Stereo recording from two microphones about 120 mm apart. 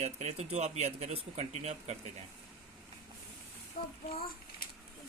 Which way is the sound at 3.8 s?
55° left (ahead or behind).